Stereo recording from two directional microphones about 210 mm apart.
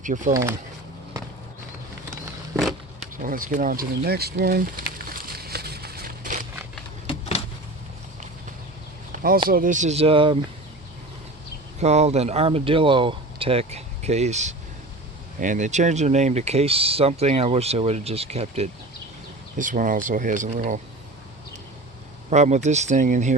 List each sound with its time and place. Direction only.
0.0 s speech: 40° right (ahead or behind)
3.2 s speech: 40° right (ahead or behind)
5.0 s a sound: 45° right (ahead or behind)
7.1 s vehicle: 30° left (ahead or behind)
9.5 s speech: 40° right (ahead or behind)
11.8 s speech: 30° right (ahead or behind)
22.3 s speech: 35° right (ahead or behind)